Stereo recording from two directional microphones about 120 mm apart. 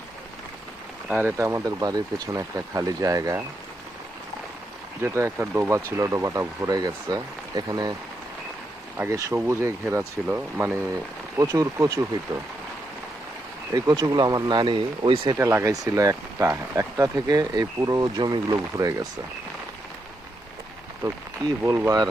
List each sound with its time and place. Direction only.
1.4 s speech: 25° right (ahead or behind)
5.0 s speech: 25° right (ahead or behind)
9.0 s speech: 20° right (ahead or behind)
10.9 s speech: 30° right (ahead or behind)
13.7 s speech: 30° right (ahead or behind)
15.4 s speech: 25° right (ahead or behind)
21.0 s speech: 35° right (ahead or behind)